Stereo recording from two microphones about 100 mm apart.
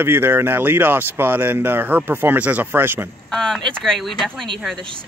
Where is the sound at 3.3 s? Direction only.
5° left (ahead or behind).